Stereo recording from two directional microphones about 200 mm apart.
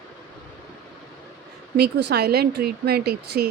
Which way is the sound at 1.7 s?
55° right (ahead or behind).